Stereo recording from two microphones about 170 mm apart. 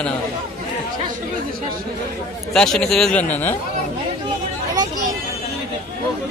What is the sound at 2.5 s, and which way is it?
Speech, 5° left (ahead or behind).